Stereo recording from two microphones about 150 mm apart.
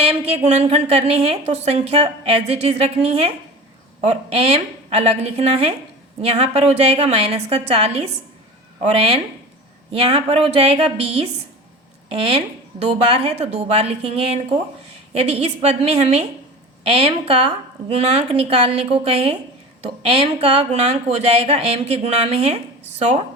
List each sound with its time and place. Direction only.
0.0 s a woman's voice: 45° right (ahead or behind)